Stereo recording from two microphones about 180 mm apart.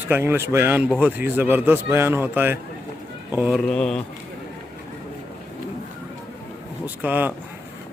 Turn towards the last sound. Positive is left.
turn(degrees=-10)  # may be behind; listen again after turning